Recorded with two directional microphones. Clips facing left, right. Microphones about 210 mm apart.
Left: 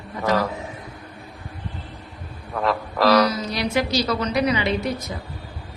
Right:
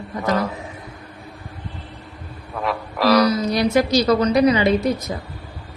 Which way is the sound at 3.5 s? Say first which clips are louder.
Right 6 dB; 45° right (ahead or behind).